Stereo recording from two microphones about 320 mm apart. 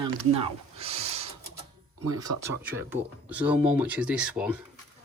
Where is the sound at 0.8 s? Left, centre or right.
Centre.